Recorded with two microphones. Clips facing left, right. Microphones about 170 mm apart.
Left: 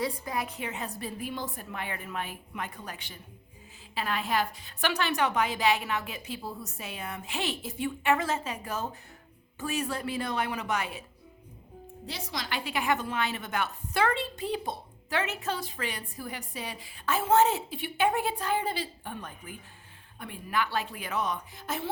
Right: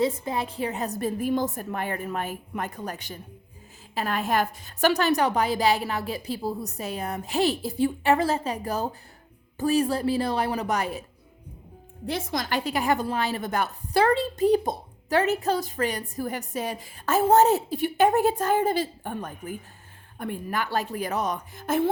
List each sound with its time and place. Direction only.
0.0 s a woman's voice: 25° right (ahead or behind)
12.0 s a woman's voice: 50° right (ahead or behind)